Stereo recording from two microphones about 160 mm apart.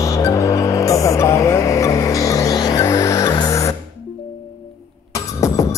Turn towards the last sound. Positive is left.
turn(degrees=20)  # may be behind; listen again after turning